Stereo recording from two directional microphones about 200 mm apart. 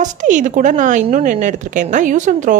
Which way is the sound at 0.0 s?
40° right (ahead or behind).